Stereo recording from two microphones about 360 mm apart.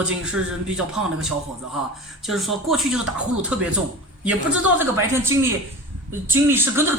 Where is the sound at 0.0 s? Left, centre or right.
Centre.